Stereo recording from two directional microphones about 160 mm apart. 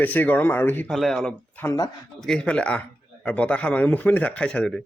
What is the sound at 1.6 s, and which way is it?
Speech, 20° left (ahead or behind).